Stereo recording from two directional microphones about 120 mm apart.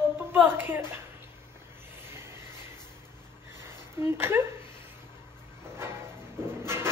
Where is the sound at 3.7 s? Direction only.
20° right (ahead or behind).